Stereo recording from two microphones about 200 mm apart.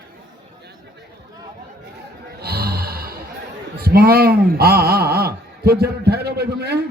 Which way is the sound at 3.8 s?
50° right (ahead or behind).